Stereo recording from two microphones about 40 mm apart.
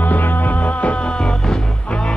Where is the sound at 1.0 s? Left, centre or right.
Left.